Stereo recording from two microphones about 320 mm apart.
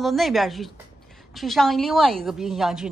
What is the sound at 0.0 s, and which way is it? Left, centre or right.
Speech, centre.